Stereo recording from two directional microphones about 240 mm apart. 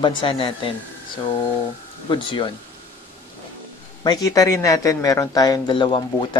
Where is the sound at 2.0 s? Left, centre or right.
Centre.